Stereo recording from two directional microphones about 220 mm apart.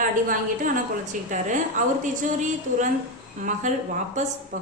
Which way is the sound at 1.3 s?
35° right (ahead or behind).